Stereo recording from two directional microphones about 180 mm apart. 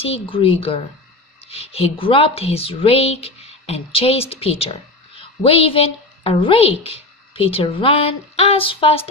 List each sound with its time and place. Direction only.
0.0 s a woman's voice: 30° left (ahead or behind)